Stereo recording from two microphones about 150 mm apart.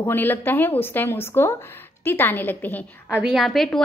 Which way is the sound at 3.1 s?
5° right (ahead or behind).